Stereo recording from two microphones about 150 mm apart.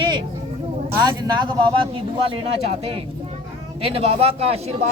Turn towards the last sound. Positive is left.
turn(degrees=-45)  # may be behind; listen again after turning